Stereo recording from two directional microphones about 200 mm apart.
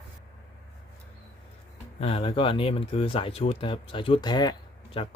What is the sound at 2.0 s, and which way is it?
Speech, 30° left (ahead or behind).